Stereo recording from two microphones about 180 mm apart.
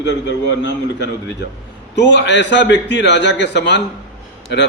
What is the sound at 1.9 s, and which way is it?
A man's voice, 80° left.